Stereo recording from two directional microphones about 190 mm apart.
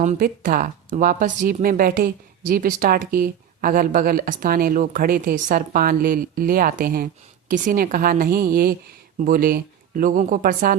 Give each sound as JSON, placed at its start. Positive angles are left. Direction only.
{"t": 0.0, "sound": "speech", "side_deg": -40}